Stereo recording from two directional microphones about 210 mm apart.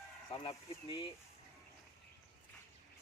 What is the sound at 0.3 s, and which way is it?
Speech, 25° left (ahead or behind).